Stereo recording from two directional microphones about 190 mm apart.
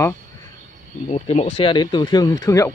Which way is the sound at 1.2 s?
35° left (ahead or behind).